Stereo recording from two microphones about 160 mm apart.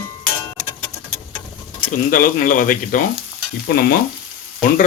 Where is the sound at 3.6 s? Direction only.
80° left.